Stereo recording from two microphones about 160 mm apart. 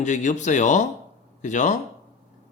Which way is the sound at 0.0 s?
50° left (ahead or behind).